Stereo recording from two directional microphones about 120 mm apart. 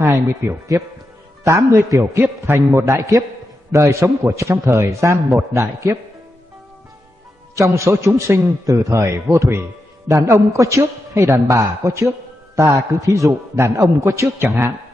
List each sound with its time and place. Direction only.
0.0 s a man's voice: 25° right (ahead or behind)
7.5 s a man's voice: 25° right (ahead or behind)